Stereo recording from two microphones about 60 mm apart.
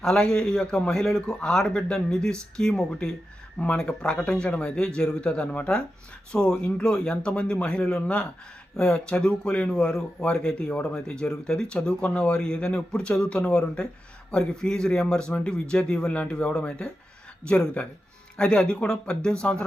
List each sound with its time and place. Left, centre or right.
0.1 s a man's voice: centre